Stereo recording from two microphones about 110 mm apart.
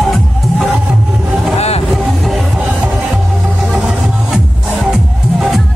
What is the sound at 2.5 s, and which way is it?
Music, 10° right (ahead or behind).